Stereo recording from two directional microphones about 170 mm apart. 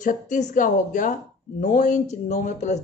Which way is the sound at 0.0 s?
50° left (ahead or behind).